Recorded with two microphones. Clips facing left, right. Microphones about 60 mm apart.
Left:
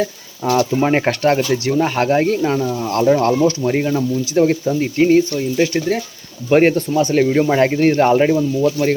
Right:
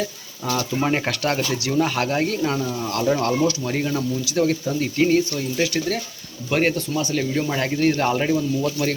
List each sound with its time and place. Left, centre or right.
0.4 s speech: left
0.8 s speech: left
7.0 s speech: left